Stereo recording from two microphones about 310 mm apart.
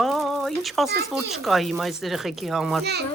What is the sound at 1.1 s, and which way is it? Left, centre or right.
Speech, centre.